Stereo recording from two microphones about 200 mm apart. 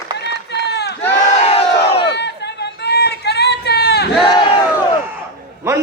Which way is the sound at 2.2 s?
55° left (ahead or behind).